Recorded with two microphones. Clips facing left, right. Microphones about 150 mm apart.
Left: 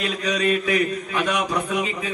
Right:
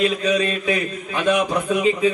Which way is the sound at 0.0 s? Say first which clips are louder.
Right 4 dB; 25° right (ahead or behind).